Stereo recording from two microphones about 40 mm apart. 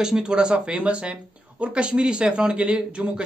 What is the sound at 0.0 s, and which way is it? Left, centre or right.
Speech, centre.